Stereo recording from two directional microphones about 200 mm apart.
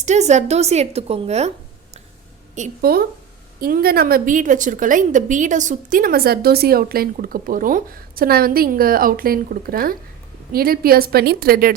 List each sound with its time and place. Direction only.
0.0 s speech: 35° right (ahead or behind)
2.6 s a woman's voice: 50° right (ahead or behind)